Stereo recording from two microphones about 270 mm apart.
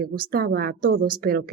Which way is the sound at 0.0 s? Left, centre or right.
Right.